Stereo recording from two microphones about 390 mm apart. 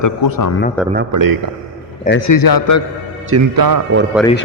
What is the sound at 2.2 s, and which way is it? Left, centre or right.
Speech, left.